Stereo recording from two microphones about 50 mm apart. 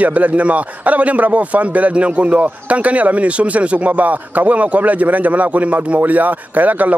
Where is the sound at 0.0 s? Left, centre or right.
Right.